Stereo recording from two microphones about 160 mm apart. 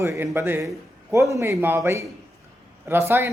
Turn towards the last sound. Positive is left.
turn(degrees=-15)  # may be behind; listen again after turning